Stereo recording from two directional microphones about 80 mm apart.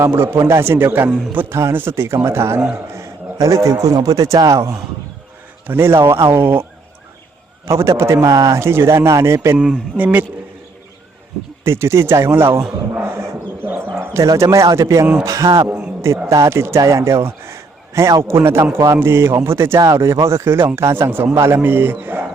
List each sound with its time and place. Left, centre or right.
0.0 s a man's voice: right
10.0 s a man's voice: centre
11.6 s a man's voice: right
12.9 s a sound: right
14.1 s a man's voice: right
16.0 s a man's voice: right